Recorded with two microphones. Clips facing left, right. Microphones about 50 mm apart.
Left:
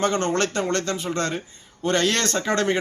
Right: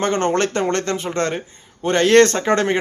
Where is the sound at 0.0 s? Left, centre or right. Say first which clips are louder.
Right 3 dB; right.